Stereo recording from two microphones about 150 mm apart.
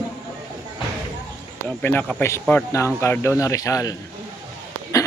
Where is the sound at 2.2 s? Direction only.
15° left (ahead or behind).